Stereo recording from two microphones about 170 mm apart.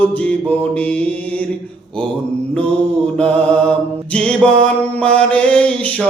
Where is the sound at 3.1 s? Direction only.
5° left (ahead or behind).